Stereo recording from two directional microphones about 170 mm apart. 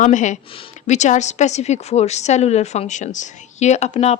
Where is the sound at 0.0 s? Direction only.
45° left (ahead or behind).